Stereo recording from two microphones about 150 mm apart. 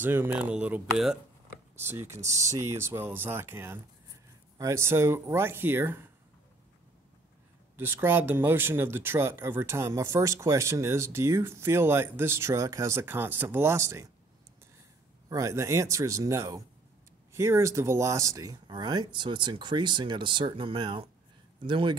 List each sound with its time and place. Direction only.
0.0 s speech: 15° right (ahead or behind)
1.8 s speech: 15° right (ahead or behind)
7.7 s speech: 15° right (ahead or behind)
15.2 s speech: 20° right (ahead or behind)